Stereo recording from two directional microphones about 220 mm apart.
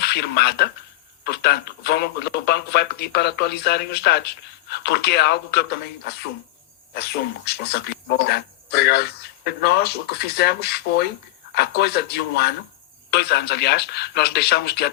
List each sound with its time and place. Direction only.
0.0 s speech: 50° left (ahead or behind)